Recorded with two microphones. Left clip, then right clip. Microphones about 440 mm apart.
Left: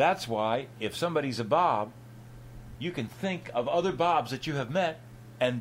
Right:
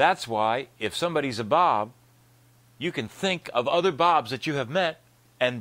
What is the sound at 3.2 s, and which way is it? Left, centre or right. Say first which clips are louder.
Speech: right 5 dB; right.